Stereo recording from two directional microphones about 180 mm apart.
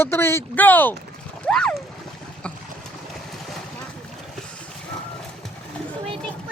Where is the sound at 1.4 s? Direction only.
5° left (ahead or behind).